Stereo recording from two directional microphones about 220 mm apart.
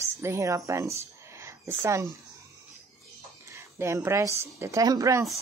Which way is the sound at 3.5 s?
15° right (ahead or behind).